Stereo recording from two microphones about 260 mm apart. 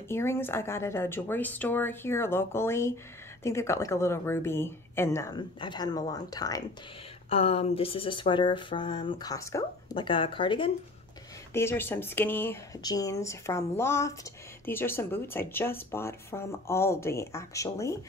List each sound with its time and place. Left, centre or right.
0.1 s speech: centre
11.5 s speech: centre